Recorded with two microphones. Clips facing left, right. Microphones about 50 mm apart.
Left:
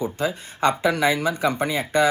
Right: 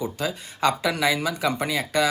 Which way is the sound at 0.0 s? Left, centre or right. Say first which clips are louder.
Left 3 dB; left.